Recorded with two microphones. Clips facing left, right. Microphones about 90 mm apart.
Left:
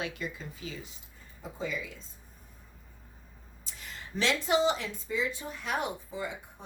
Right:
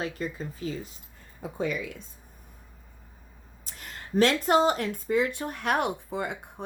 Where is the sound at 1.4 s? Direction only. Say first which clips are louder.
Right 6 dB; 70° right (ahead or behind).